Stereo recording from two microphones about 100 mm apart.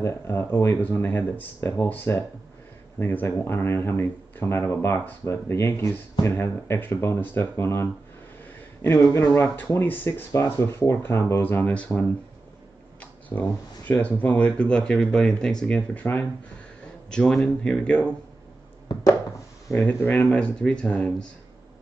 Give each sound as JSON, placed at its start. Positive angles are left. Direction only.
{"t": 0.0, "sound": "speech", "side_deg": 20}
{"t": 9.0, "sound": "speech", "side_deg": 35}
{"t": 9.6, "sound": "speech", "side_deg": 20}
{"t": 13.0, "sound": "speech", "side_deg": 15}
{"t": 17.1, "sound": "speech", "side_deg": 5}
{"t": 19.7, "sound": "speech", "side_deg": 0}
{"t": 20.3, "sound": "speech", "side_deg": 10}